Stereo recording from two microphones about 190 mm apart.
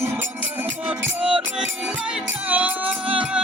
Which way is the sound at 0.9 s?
5° right (ahead or behind).